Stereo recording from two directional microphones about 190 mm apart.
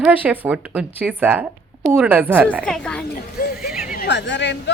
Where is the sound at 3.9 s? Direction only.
65° left (ahead or behind).